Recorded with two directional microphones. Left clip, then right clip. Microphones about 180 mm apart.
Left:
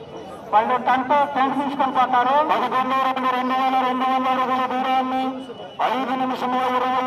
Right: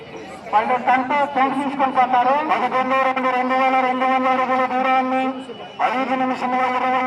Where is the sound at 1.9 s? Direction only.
15° right (ahead or behind).